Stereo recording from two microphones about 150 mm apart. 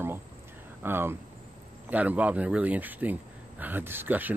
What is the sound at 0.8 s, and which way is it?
Speech, 15° right (ahead or behind).